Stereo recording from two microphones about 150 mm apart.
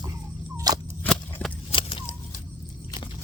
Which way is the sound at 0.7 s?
25° right (ahead or behind).